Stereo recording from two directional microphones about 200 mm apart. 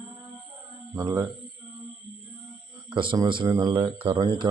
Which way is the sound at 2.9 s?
25° right (ahead or behind).